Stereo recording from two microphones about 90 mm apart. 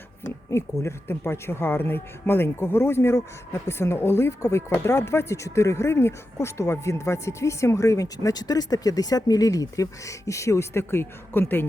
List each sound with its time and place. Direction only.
0.5 s speech: 30° left (ahead or behind)